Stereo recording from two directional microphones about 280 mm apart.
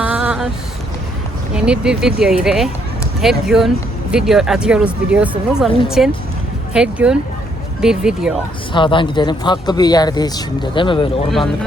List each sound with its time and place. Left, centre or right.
0.0 s a sound: centre
1.5 s speech: centre
8.7 s speech: centre